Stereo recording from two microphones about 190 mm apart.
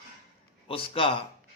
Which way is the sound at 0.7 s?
30° left (ahead or behind).